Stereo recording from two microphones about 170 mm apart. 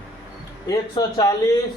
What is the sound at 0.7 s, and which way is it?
Speech, 20° left (ahead or behind).